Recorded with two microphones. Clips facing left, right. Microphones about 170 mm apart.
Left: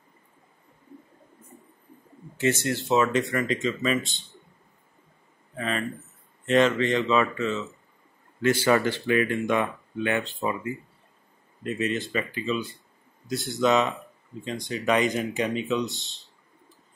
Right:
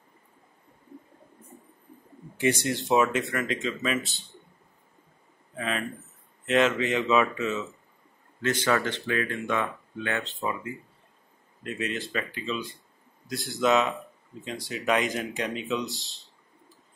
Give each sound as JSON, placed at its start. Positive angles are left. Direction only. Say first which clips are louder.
{"t": 2.3, "sound": "speech", "louder": "left 1 dB", "side_deg": -15}
{"t": 3.1, "sound": "speech", "louder": "left 3 dB", "side_deg": 0}
{"t": 5.6, "sound": "a sound", "louder": "left 2 dB", "side_deg": -5}
{"t": 6.4, "sound": "speech", "louder": "left 2 dB", "side_deg": -5}
{"t": 8.4, "sound": "speech", "louder": "left 4 dB", "side_deg": 10}